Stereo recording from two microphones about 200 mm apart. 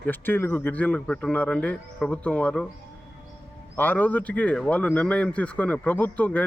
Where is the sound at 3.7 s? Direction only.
10° left (ahead or behind).